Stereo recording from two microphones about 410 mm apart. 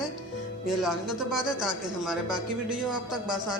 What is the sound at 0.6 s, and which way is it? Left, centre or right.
Speech, centre.